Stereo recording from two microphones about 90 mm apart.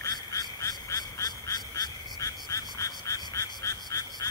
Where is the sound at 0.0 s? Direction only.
40° left (ahead or behind).